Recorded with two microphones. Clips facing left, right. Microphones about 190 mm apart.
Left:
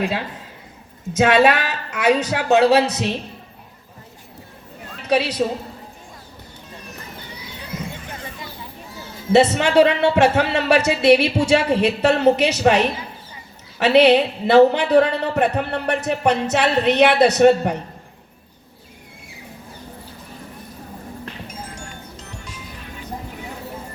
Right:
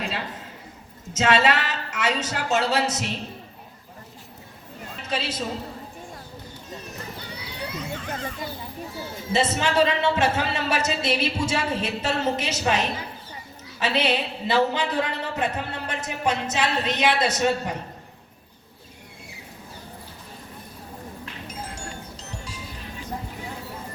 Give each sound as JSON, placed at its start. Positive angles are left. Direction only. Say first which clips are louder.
{"t": 1.1, "sound": "speech", "louder": "left 6 dB", "side_deg": 65}
{"t": 5.0, "sound": "a man's voice", "louder": "left 10 dB", "side_deg": 70}
{"t": 9.3, "sound": "a man's voice", "louder": "left 8 dB", "side_deg": 65}